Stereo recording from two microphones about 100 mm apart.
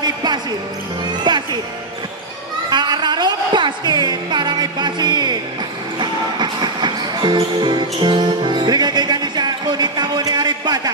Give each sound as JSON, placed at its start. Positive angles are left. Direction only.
{"t": 0.0, "sound": "basketball bounce", "side_deg": -45}
{"t": 1.2, "sound": "music", "side_deg": -50}
{"t": 2.7, "sound": "music", "side_deg": -50}